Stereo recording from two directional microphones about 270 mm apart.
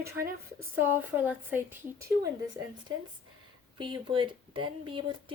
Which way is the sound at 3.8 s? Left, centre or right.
Centre.